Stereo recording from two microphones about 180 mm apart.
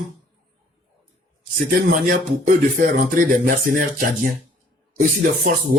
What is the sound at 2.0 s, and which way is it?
Speech, 45° right (ahead or behind).